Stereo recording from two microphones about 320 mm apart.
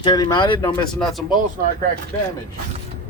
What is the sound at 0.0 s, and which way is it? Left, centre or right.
Speech, centre.